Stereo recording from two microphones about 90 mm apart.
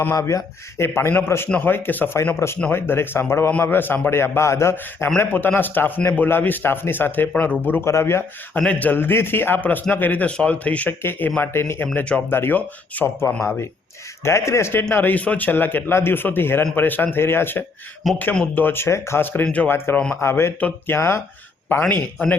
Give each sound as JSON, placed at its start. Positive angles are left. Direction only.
{"t": 0.2, "sound": "a man's voice", "side_deg": 35}
{"t": 2.4, "sound": "a man's voice", "side_deg": 35}
{"t": 7.7, "sound": "a man's voice", "side_deg": 30}
{"t": 8.5, "sound": "a man's voice", "side_deg": 15}
{"t": 11.9, "sound": "speech", "side_deg": 15}
{"t": 12.3, "sound": "a man's voice", "side_deg": 25}
{"t": 14.3, "sound": "a man's voice", "side_deg": 35}
{"t": 18.0, "sound": "a man's voice", "side_deg": 0}
{"t": 18.5, "sound": "a man's voice", "side_deg": 25}
{"t": 19.7, "sound": "a man's voice", "side_deg": 25}